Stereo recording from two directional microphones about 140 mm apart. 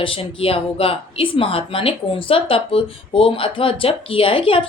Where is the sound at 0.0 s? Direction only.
40° left (ahead or behind).